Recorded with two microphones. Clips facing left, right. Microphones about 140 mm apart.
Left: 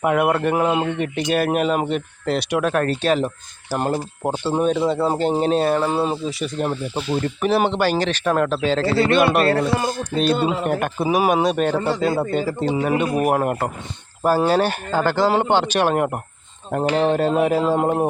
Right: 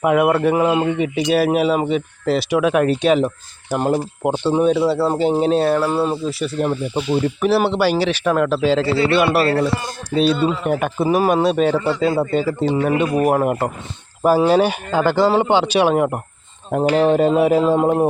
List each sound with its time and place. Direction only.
0.0 s speech: centre (ahead or behind)
5.9 s speech: 20° left (ahead or behind)
6.2 s speech: centre (ahead or behind)
9.0 s a man's voice: 50° left (ahead or behind)
10.6 s speech: centre (ahead or behind)
12.7 s a man's voice: 5° left (ahead or behind)